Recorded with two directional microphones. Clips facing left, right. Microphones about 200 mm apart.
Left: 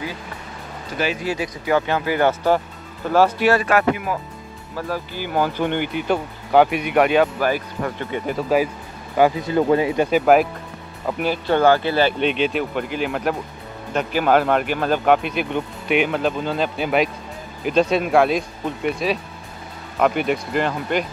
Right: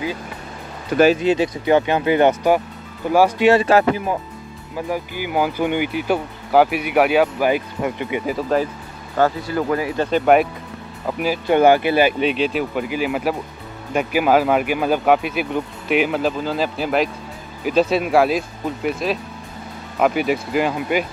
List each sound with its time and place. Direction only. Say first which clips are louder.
0.9 s speech: right 10 dB; 60° right (ahead or behind)
1.2 s speech: right 7 dB; 25° right (ahead or behind)
4.7 s speech: right 2 dB; 15° right (ahead or behind)
8.3 s speech: left 1 dB; centre (ahead or behind)
9.1 s speech: left 2 dB; 15° left (ahead or behind)
10.2 s speech: right 3 dB; centre (ahead or behind)
11.4 s speech: right 3 dB; 15° right (ahead or behind)
12.2 s speech: right 1 dB; centre (ahead or behind)